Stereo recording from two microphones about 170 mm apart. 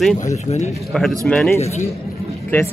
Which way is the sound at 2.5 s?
10° left (ahead or behind).